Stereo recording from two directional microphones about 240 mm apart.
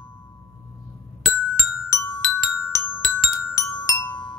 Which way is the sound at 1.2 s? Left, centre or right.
Centre.